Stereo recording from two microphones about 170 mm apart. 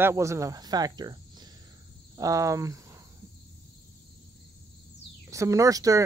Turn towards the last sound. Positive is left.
turn(degrees=-20)  # may be behind; listen again after turning